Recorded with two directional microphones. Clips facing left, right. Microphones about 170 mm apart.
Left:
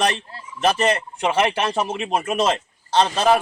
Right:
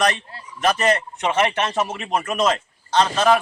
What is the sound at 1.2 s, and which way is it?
Speech, 10° left (ahead or behind).